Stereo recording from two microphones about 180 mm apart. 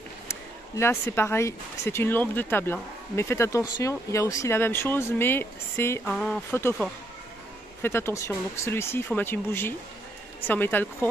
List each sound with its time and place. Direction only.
0.3 s speech: 15° left (ahead or behind)
6.1 s speech: centre (ahead or behind)
7.8 s speech: 15° left (ahead or behind)